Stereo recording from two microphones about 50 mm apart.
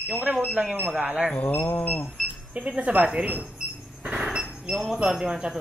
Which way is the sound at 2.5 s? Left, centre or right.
Right.